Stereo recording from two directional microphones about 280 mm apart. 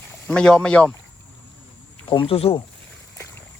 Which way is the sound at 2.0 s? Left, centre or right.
Centre.